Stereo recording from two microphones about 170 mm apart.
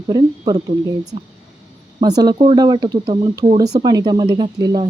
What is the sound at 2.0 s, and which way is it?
Speech, 25° right (ahead or behind).